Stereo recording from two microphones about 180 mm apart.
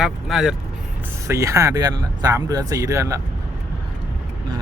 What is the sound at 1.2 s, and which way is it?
Speech, 15° right (ahead or behind).